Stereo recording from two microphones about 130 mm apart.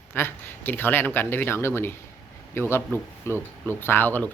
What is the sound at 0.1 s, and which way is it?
Speech, 15° left (ahead or behind).